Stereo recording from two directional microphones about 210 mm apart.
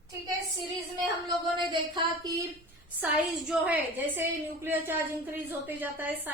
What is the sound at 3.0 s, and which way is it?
A woman's voice, 5° right (ahead or behind).